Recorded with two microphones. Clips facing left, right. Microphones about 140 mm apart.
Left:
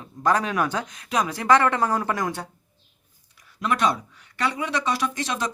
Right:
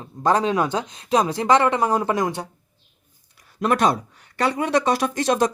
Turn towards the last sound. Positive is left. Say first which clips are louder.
# right 7 dB
turn(degrees=-45)  # may be behind; listen again after turning